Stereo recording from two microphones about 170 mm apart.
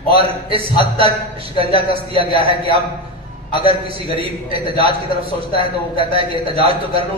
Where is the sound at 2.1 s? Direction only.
35° right (ahead or behind).